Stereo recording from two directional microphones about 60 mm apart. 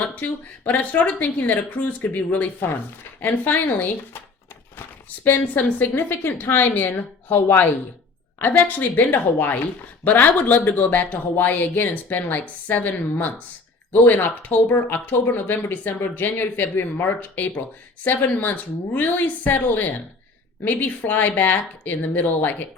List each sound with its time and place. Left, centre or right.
0.0 s speech: left
5.2 s speech: left